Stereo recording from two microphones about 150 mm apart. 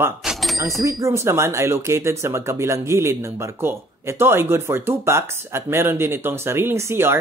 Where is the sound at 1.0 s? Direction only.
20° right (ahead or behind).